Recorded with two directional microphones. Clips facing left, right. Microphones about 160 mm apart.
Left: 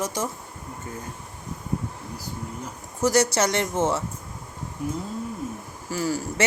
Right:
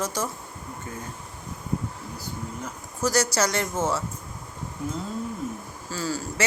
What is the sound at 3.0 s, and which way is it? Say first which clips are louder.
Speech: left 3 dB; 25° left (ahead or behind).